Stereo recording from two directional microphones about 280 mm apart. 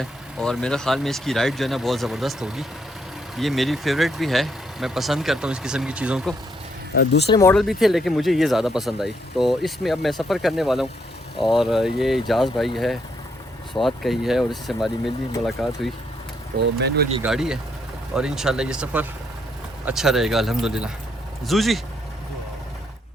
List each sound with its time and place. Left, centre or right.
0.0 s speech: centre
6.9 s speech: left
7.3 s speech: centre
7.5 s speech: centre
17.2 s speech: centre